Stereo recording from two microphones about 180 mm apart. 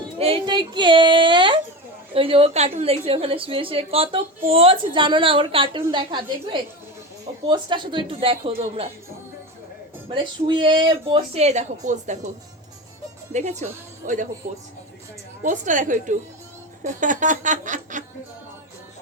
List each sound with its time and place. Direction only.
0.2 s a sound: 30° right (ahead or behind)
2.1 s a woman's voice: 30° right (ahead or behind)
10.1 s speech: 25° right (ahead or behind); by 12.3 s 40° right (ahead or behind)
13.3 s a woman's voice: 40° right (ahead or behind)
15.4 s speech: 45° right (ahead or behind)